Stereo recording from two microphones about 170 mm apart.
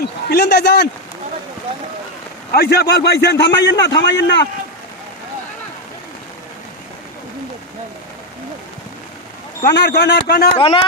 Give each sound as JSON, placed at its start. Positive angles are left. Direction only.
{"t": 0.0, "sound": "a man's voice", "side_deg": 75}
{"t": 2.5, "sound": "a man's voice", "side_deg": 70}
{"t": 9.7, "sound": "a man's voice", "side_deg": 80}
{"t": 10.6, "sound": "a man's voice", "side_deg": 30}